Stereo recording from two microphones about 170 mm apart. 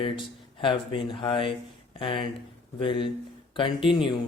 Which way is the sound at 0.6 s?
30° left (ahead or behind).